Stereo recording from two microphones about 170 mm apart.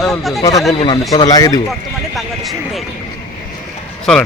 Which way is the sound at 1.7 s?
Centre (ahead or behind).